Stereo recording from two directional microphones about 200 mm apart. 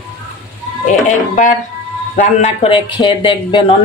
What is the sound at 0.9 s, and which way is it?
A man's voice, 40° left (ahead or behind).